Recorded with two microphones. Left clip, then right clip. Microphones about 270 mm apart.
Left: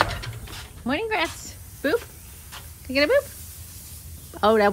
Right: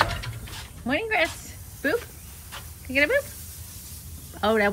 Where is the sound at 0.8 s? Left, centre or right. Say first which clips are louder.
Right 1 dB; centre.